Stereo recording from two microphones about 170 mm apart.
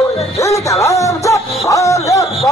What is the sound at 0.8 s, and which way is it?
Music, 20° left (ahead or behind).